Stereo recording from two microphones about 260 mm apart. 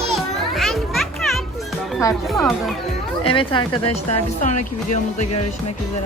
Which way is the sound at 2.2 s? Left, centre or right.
Centre.